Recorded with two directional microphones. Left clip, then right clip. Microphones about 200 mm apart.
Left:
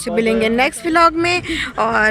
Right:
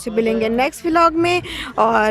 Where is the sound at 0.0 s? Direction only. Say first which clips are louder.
Left 2 dB; 10° right (ahead or behind).